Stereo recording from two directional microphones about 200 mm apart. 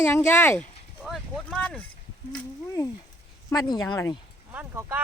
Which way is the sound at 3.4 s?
20° left (ahead or behind).